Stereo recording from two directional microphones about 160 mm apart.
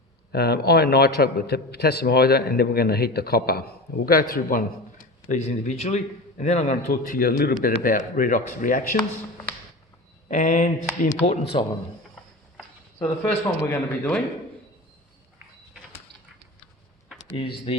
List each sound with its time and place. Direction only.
0.3 s a man's voice: 85° left; by 7.2 s 45° left (ahead or behind)
7.2 s a man's voice: 70° left (ahead or behind)
7.8 s speech: 60° left (ahead or behind)
10.2 s speech: 55° left (ahead or behind)
11.3 s speech: 35° left (ahead or behind)
13.0 s a man's voice: 15° left (ahead or behind)
17.3 s speech: 35° left (ahead or behind)